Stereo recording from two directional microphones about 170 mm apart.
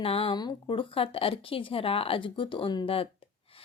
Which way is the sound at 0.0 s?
35° left (ahead or behind).